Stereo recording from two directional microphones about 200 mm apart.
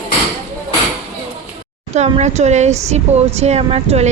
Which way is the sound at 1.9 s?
35° right (ahead or behind).